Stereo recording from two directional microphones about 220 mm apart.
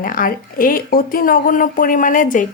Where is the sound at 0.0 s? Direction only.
40° left (ahead or behind).